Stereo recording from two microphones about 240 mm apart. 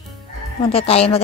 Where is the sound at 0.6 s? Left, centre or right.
Left.